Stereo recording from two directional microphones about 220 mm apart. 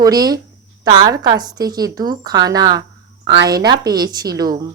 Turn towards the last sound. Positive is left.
turn(degrees=-15)  # may be behind; listen again after turning